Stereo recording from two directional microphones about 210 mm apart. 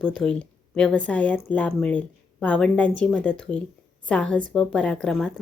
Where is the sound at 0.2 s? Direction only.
Centre (ahead or behind).